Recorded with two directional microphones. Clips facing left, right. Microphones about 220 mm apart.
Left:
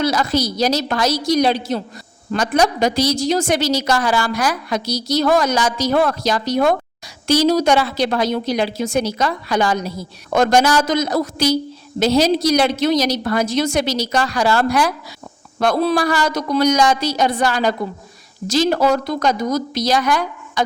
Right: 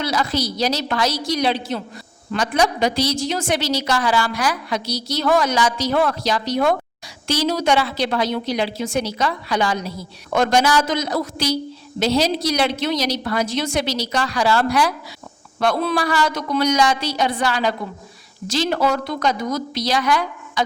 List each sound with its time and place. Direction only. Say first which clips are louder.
0.0 s a woman's voice: left 4 dB; 45° left (ahead or behind)